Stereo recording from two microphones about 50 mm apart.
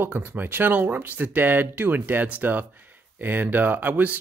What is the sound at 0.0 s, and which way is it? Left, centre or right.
Speech, right.